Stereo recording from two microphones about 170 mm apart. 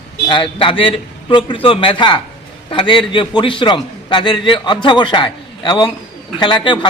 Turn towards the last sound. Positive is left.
turn(degrees=25)  # may be behind; listen again after turning